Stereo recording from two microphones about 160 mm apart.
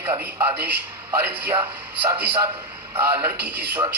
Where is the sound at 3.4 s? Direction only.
90° right.